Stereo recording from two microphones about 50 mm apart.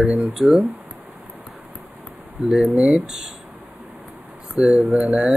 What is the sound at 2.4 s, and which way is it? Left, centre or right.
Speech, centre.